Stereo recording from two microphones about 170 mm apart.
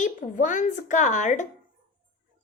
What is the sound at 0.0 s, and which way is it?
A woman's voice, 50° left (ahead or behind).